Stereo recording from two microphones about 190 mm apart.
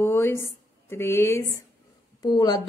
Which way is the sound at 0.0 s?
10° left (ahead or behind).